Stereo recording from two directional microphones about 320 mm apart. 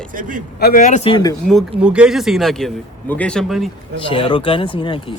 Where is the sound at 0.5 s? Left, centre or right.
Left.